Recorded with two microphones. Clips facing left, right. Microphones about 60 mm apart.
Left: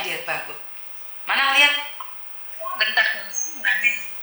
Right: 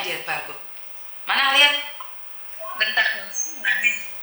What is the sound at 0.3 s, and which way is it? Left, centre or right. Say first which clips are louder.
A woman's voice: even; left.